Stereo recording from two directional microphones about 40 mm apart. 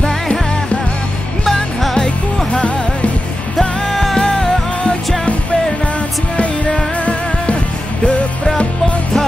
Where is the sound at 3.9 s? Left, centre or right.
Centre.